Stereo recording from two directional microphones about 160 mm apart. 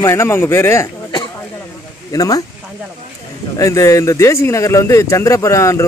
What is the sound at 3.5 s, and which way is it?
Speech, 20° left (ahead or behind).